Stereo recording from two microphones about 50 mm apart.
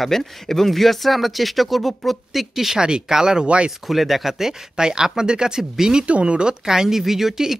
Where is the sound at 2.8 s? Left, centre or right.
Centre.